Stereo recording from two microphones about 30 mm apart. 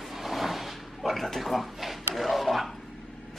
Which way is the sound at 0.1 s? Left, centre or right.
Centre.